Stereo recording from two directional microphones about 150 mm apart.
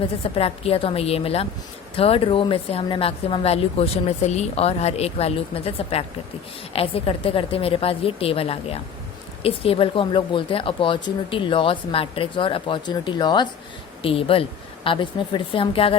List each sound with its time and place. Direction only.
0.3 s speech: 40° left (ahead or behind)